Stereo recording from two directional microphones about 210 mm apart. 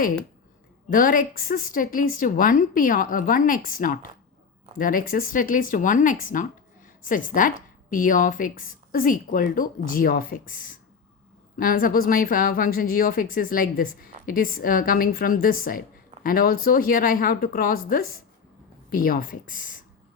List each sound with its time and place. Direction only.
0.9 s a woman's voice: 40° left (ahead or behind)
11.5 s a woman's voice: 40° left (ahead or behind)